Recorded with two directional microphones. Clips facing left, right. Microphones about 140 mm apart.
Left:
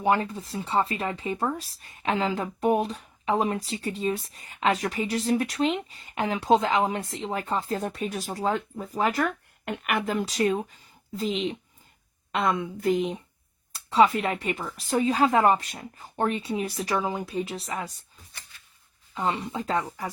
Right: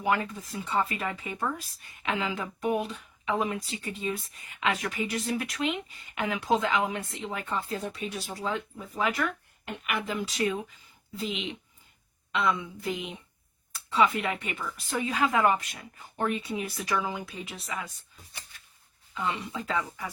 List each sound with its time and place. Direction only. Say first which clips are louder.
0.0 s speech: left 4 dB; 30° left (ahead or behind)
7.8 s speech: left 4 dB; 50° left (ahead or behind)
9.6 s speech: left 5 dB; 55° left (ahead or behind); by 11.5 s 35° left (ahead or behind)
12.3 s speech: left 2 dB; 50° left (ahead or behind)
13.9 s speech: left 4 dB; 35° left (ahead or behind)
19.1 s speech: left 4 dB; 35° left (ahead or behind)